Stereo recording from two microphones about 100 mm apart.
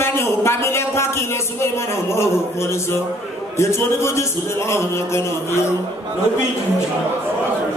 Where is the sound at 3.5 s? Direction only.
30° left (ahead or behind).